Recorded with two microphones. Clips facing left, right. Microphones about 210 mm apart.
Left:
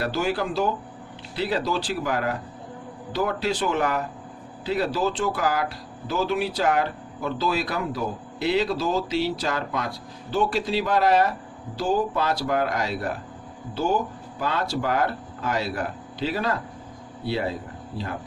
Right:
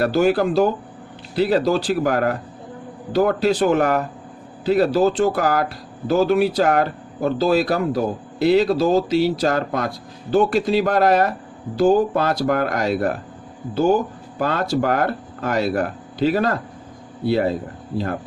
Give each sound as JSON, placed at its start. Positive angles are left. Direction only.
{"t": 0.0, "sound": "speech", "side_deg": -50}
{"t": 14.3, "sound": "speech", "side_deg": -50}